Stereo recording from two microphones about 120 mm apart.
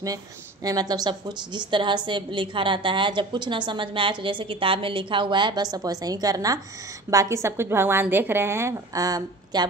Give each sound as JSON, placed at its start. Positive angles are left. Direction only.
{"t": 0.7, "sound": "a woman's voice", "side_deg": -35}